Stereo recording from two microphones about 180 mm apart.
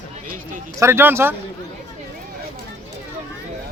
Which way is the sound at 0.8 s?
15° right (ahead or behind).